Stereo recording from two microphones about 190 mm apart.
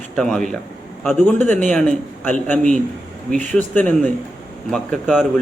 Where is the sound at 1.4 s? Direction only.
40° right (ahead or behind).